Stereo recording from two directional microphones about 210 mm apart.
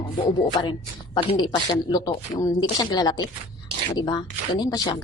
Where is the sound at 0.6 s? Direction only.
20° left (ahead or behind).